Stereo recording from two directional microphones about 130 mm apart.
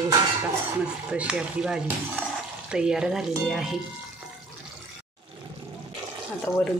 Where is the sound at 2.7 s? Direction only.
5° right (ahead or behind).